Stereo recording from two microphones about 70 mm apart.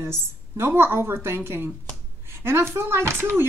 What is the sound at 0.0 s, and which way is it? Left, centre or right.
Speech, right.